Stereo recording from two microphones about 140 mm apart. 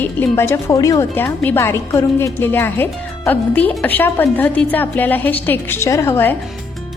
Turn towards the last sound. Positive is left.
turn(degrees=15)  # may be behind; listen again after turning